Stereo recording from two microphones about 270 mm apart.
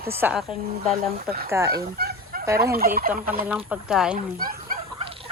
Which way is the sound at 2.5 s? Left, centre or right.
Right.